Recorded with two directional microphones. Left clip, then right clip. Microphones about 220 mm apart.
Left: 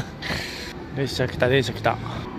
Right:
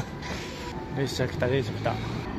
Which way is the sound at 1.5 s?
25° left (ahead or behind).